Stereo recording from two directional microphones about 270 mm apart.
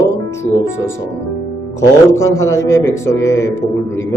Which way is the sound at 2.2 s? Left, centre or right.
Centre.